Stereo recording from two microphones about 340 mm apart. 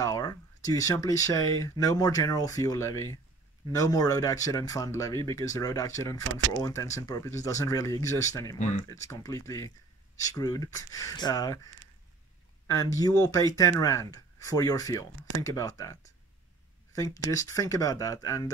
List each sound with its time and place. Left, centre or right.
0.0 s speech: centre
8.5 s speech: left
8.8 s speech: centre